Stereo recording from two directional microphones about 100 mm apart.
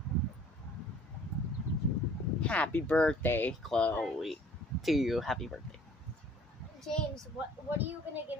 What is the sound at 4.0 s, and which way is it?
A woman's voice, centre (ahead or behind).